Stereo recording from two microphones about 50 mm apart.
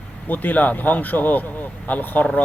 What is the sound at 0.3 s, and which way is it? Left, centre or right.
Speech, left.